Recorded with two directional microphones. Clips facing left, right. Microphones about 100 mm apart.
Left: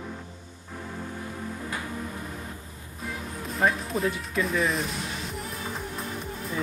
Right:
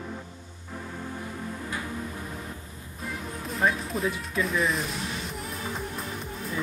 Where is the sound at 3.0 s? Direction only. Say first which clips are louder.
Even; centre (ahead or behind).